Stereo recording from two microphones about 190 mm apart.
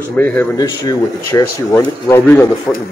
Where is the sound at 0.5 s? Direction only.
20° left (ahead or behind).